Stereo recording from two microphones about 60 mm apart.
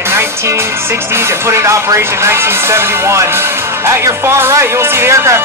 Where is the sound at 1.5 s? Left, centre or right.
Right.